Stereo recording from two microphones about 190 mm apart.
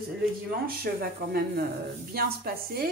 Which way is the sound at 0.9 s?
55° right (ahead or behind).